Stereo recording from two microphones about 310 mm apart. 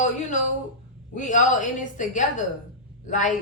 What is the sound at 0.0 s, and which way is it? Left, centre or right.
Speech, left.